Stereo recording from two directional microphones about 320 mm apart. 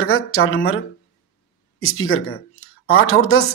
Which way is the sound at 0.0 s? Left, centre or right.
Left.